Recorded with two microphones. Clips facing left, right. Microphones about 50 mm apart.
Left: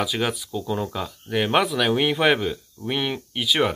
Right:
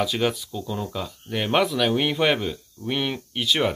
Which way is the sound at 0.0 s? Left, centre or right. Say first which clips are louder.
Right 1 dB; centre.